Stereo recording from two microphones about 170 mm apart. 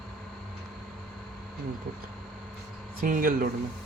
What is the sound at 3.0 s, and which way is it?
Speech, 55° right (ahead or behind).